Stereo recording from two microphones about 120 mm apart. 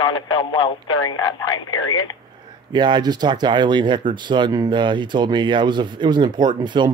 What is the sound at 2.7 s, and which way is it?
Speech, 40° right (ahead or behind).